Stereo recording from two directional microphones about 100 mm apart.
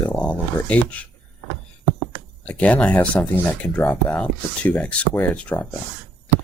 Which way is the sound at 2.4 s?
10° left (ahead or behind).